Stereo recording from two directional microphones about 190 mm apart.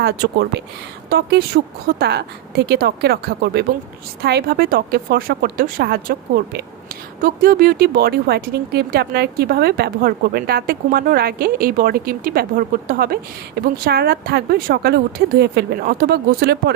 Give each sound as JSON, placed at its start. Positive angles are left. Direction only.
{"t": 0.0, "sound": "speech", "side_deg": -60}